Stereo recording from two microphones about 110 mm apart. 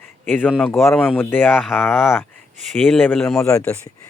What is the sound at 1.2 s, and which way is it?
Speech, 20° left (ahead or behind).